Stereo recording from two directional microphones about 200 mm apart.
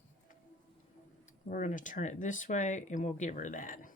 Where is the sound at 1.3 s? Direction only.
40° left (ahead or behind).